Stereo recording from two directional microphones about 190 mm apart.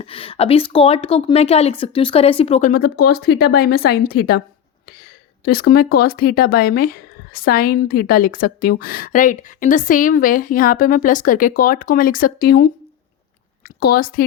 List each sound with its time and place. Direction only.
0.0 s a woman's voice: 30° left (ahead or behind); by 4.4 s 55° left (ahead or behind)
5.5 s a woman's voice: 55° left (ahead or behind)
13.7 s a woman's voice: 50° left (ahead or behind)